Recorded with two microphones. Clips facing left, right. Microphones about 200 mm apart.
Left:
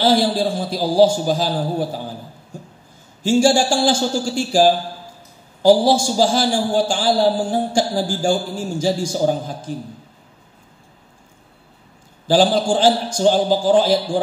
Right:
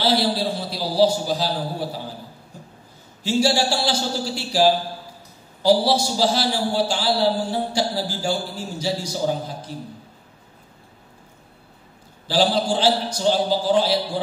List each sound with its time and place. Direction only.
0.0 s a man's voice: 50° left (ahead or behind)
2.5 s a sound: 45° left (ahead or behind)
3.2 s a man's voice: 50° left (ahead or behind)
12.3 s a man's voice: 50° left (ahead or behind)